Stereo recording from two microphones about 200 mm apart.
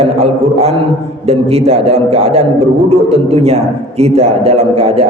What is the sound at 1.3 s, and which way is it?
A man's voice, 30° right (ahead or behind).